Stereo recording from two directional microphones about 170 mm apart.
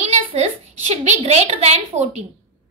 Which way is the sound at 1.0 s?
40° right (ahead or behind).